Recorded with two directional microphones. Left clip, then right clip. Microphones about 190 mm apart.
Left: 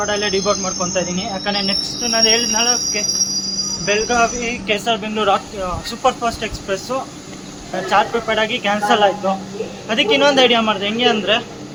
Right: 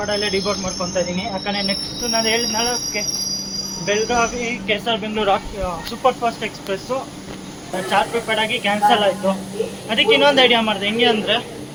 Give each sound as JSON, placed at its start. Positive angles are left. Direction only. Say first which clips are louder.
{"t": 0.0, "sound": "speech", "louder": "left 2 dB", "side_deg": 20}
{"t": 7.9, "sound": "speech", "louder": "left 3 dB", "side_deg": 15}